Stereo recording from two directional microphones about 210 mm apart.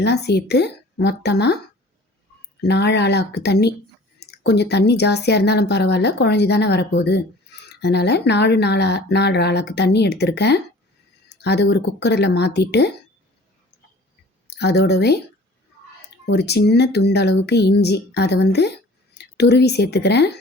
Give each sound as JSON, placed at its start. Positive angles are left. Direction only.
{"t": 0.0, "sound": "speech", "side_deg": 50}
{"t": 2.6, "sound": "speech", "side_deg": 55}
{"t": 14.5, "sound": "a woman's voice", "side_deg": 50}